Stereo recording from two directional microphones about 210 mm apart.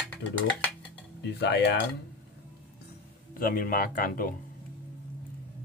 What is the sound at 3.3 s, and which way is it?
Speech, 40° left (ahead or behind).